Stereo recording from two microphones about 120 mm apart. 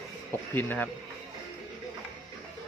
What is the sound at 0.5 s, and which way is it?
Speech, 15° left (ahead or behind).